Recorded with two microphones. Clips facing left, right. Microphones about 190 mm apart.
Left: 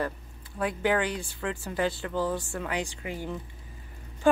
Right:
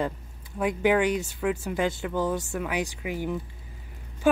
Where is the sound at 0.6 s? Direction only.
15° right (ahead or behind).